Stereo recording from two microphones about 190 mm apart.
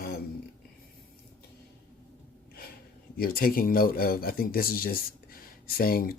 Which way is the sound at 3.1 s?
50° left (ahead or behind).